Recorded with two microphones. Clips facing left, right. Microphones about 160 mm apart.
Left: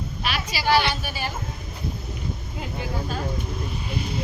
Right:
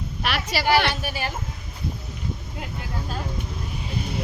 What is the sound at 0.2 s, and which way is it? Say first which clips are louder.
Speech: right 4 dB; 65° right (ahead or behind).